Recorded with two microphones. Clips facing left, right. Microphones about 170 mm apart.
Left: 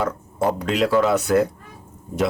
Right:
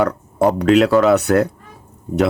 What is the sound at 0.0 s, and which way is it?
Speech, 70° right (ahead or behind).